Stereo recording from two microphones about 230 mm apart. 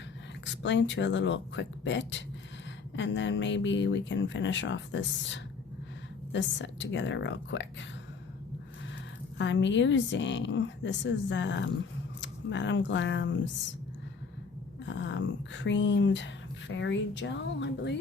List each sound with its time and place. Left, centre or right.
0.4 s speech: left
9.4 s speech: left
14.8 s speech: left